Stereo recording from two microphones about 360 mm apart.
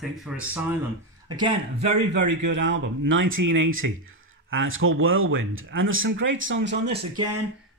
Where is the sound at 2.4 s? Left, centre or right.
Right.